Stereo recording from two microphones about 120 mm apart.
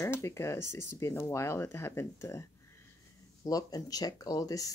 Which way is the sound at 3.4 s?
30° left (ahead or behind).